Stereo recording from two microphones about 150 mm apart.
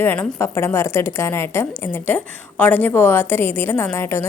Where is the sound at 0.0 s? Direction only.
10° left (ahead or behind).